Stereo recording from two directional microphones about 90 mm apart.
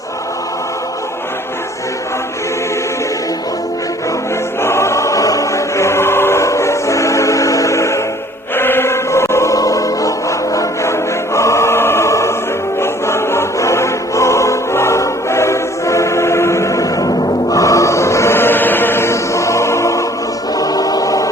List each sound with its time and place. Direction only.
4.6 s choir: 30° left (ahead or behind)
8.5 s music: 25° left (ahead or behind)
11.3 s choir: 35° left (ahead or behind)
12.8 s music: 30° left (ahead or behind)